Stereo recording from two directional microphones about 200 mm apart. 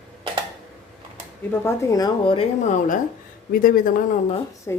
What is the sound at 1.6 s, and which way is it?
A woman's voice, 15° left (ahead or behind).